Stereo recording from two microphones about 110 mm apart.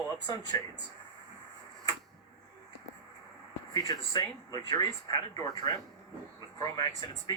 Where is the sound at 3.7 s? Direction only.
40° left (ahead or behind).